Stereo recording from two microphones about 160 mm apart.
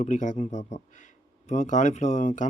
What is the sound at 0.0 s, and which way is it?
Speech, 50° left (ahead or behind).